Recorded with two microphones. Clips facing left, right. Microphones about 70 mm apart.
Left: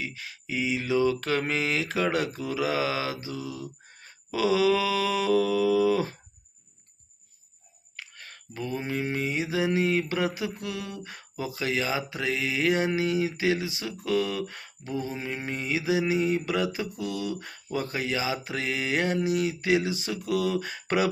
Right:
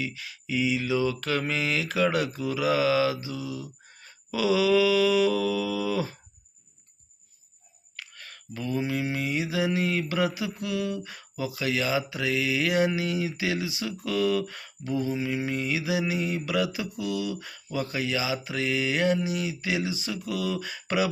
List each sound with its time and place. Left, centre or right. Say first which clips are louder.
0.0 s speech: right 2 dB; left
7.9 s speech: even; left